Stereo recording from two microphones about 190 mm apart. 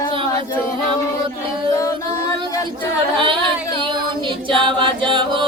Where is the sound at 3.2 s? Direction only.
25° right (ahead or behind).